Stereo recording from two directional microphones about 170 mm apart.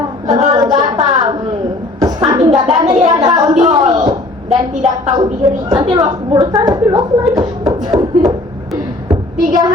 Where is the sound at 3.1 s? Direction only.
20° right (ahead or behind).